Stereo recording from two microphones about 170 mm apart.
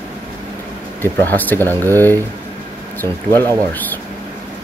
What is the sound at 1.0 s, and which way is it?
Speech, 10° left (ahead or behind).